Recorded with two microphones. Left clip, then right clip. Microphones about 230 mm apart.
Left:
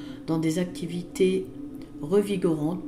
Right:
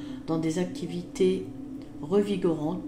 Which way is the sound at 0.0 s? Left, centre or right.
Centre.